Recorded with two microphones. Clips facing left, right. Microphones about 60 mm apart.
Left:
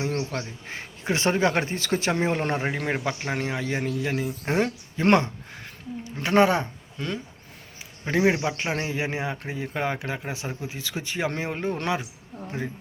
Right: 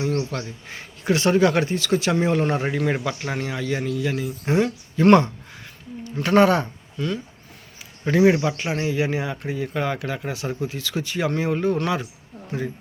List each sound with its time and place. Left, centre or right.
0.0 s speech: left
4.9 s speech: left
7.0 s speech: left
8.1 s speech: centre
8.4 s speech: left